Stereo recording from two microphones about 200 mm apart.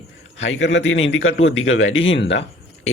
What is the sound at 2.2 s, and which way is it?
Speech, 60° left (ahead or behind).